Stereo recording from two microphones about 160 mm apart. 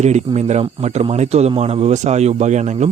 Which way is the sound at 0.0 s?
45° right (ahead or behind).